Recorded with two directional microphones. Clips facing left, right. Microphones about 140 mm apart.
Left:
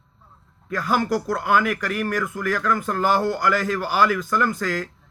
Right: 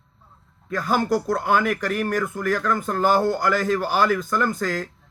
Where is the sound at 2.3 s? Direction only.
45° right (ahead or behind).